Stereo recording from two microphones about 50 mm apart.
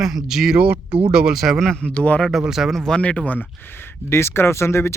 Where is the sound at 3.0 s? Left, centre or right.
Left.